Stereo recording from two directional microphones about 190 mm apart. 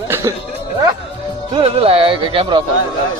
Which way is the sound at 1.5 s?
30° right (ahead or behind).